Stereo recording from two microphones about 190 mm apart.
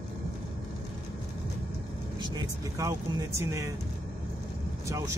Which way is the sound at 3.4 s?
15° right (ahead or behind).